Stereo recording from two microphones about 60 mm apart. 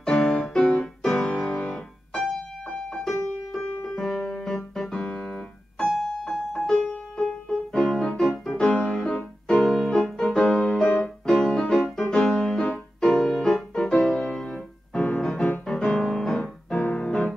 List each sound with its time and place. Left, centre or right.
0.0 s music: centre
1.3 s music: centre
3.5 s piano: centre
6.0 s music: centre
9.6 s music: centre